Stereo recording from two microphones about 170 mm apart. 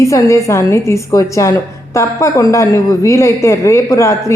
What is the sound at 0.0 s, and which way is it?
A woman's voice, 15° left (ahead or behind).